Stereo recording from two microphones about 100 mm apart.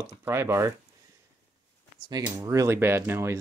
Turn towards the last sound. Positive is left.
turn(degrees=-25)  # may be behind; listen again after turning